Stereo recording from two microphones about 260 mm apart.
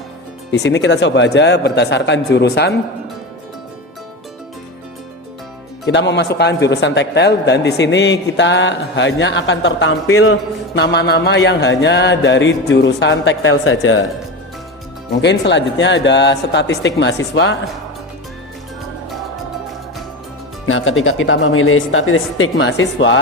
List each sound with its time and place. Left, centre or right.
0.5 s speech: left
5.8 s speech: left
15.2 s speech: left
20.7 s speech: left